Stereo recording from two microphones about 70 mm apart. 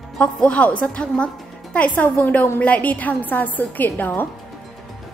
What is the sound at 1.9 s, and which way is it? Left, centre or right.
A woman's voice, left.